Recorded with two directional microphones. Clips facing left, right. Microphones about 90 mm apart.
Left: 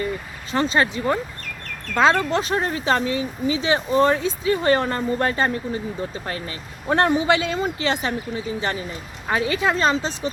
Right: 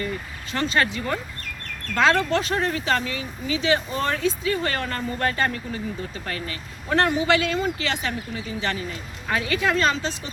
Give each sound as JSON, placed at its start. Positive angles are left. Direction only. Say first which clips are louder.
{"t": 0.5, "sound": "speech", "louder": "left 3 dB", "side_deg": 25}
{"t": 2.3, "sound": "speech", "louder": "left 1 dB", "side_deg": 20}